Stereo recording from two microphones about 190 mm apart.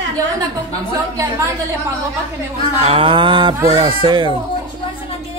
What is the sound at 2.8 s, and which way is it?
Speech, 30° right (ahead or behind).